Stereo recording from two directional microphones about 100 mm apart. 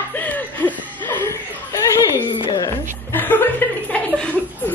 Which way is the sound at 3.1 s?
20° left (ahead or behind).